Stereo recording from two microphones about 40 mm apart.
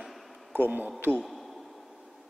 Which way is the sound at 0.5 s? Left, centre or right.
Right.